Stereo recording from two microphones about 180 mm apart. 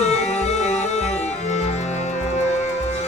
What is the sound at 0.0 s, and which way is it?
Music, 40° left (ahead or behind).